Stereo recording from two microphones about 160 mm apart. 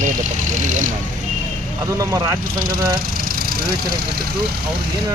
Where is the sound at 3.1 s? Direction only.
65° right (ahead or behind).